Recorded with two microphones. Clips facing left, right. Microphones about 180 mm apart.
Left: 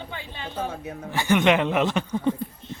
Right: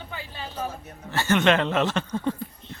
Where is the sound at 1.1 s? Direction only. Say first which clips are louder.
Left 1 dB; 15° left (ahead or behind).